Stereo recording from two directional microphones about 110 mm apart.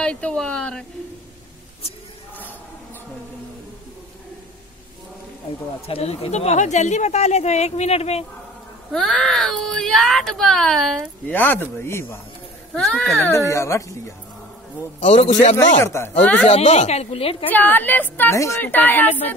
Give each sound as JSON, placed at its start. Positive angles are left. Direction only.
{"t": 0.0, "sound": "speech", "side_deg": 10}
{"t": 5.9, "sound": "speech", "side_deg": 60}
{"t": 8.9, "sound": "speech", "side_deg": 5}
{"t": 11.3, "sound": "speech", "side_deg": 20}
{"t": 12.7, "sound": "speech", "side_deg": 10}
{"t": 13.5, "sound": "speech", "side_deg": 25}
{"t": 15.0, "sound": "a man's voice", "side_deg": 85}
{"t": 15.8, "sound": "speech", "side_deg": 25}
{"t": 16.4, "sound": "a woman's voice", "side_deg": 80}
{"t": 17.5, "sound": "speech", "side_deg": 15}
{"t": 18.3, "sound": "speech", "side_deg": 25}